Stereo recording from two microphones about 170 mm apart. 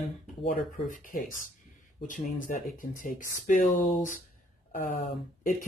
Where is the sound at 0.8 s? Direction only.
50° left (ahead or behind).